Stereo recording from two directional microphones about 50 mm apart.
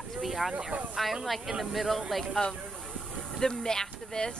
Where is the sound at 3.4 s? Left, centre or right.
Centre.